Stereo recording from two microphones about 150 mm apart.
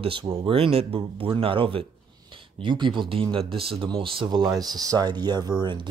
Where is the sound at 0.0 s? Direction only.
35° right (ahead or behind).